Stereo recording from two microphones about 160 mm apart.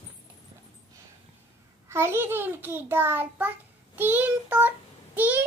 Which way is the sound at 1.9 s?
15° right (ahead or behind).